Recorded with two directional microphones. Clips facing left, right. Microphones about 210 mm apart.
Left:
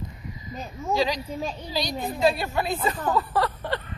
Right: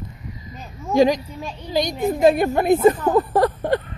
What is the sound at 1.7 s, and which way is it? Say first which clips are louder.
Speech: right 10 dB; 20° right (ahead or behind).